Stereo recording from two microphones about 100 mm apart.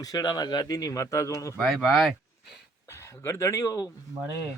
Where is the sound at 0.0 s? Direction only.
40° left (ahead or behind).